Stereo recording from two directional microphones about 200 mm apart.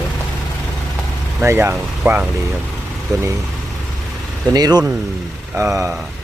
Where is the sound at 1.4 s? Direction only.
10° right (ahead or behind).